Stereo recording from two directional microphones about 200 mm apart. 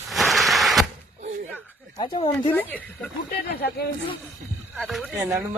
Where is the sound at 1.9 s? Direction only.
25° left (ahead or behind).